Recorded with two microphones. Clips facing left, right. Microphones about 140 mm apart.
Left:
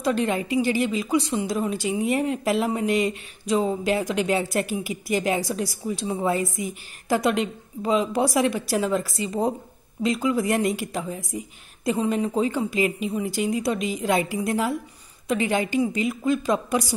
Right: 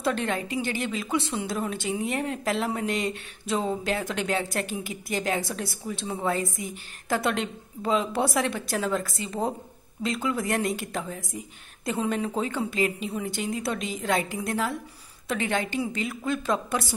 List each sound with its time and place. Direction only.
0.0 s speech: centre (ahead or behind)